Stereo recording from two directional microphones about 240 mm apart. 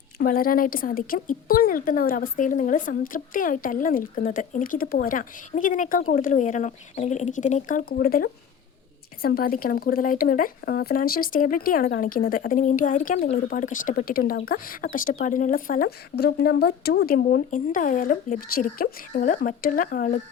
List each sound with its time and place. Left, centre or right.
0.2 s a woman's voice: left